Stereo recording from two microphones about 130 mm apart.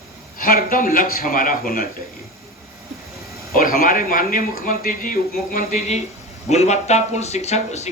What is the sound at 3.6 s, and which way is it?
Speech, 90° left.